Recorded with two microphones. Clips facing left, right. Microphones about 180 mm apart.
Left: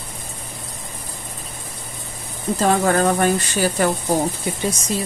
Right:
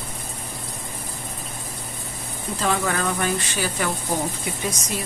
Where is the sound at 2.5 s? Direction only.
45° left (ahead or behind).